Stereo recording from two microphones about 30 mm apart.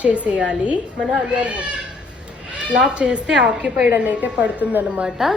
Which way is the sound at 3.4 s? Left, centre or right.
Right.